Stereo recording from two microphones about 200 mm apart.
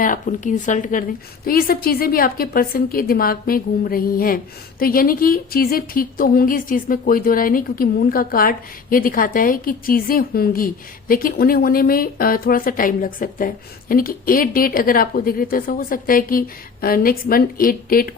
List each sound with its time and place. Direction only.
0.0 s a woman's voice: 40° left (ahead or behind)